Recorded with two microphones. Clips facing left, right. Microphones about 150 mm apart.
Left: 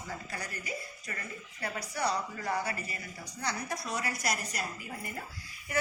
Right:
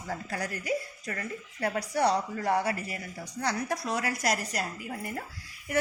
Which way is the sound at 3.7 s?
90° right.